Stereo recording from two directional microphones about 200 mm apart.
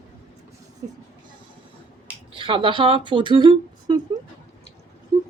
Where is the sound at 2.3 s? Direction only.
25° right (ahead or behind).